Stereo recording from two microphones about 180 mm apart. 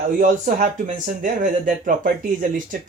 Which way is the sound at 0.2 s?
45° right (ahead or behind).